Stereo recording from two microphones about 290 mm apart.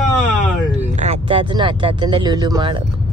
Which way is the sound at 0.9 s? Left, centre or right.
Right.